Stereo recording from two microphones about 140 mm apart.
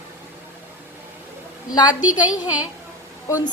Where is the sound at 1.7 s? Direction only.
30° left (ahead or behind).